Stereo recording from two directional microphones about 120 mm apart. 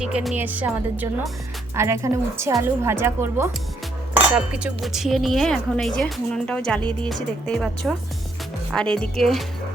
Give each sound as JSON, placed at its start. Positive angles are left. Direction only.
{"t": 0.0, "sound": "a woman's voice", "side_deg": -5}
{"t": 4.4, "sound": "speech", "side_deg": -10}